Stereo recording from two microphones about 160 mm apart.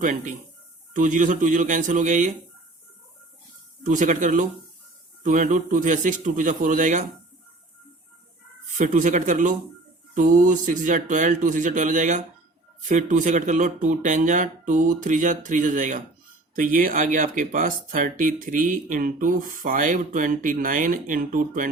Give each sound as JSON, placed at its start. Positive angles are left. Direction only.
{"t": 0.0, "sound": "speech", "side_deg": -50}
{"t": 3.8, "sound": "speech", "side_deg": -50}
{"t": 8.8, "sound": "speech", "side_deg": -50}